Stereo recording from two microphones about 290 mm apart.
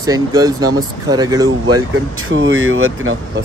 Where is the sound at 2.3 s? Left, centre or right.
Right.